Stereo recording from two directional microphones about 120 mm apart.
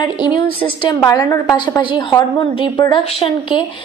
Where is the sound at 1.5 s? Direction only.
40° left (ahead or behind).